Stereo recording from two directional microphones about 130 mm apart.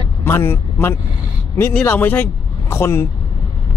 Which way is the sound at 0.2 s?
20° left (ahead or behind).